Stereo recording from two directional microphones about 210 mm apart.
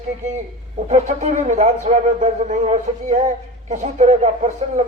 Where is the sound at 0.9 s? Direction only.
35° right (ahead or behind).